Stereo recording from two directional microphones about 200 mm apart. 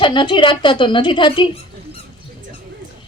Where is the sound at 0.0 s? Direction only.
25° left (ahead or behind).